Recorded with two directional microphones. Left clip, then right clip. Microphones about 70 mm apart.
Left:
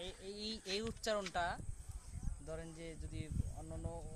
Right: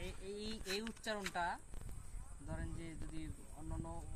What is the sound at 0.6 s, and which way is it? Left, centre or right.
Speech, left.